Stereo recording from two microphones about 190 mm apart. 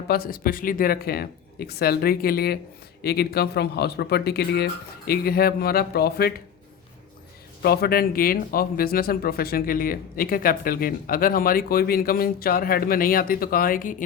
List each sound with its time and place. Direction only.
0.1 s speech: 50° left (ahead or behind)
7.6 s speech: 55° left (ahead or behind)